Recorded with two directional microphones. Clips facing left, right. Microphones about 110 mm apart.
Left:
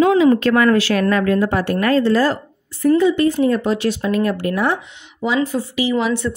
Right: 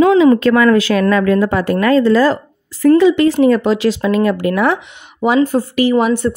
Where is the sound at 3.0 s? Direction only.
90° right.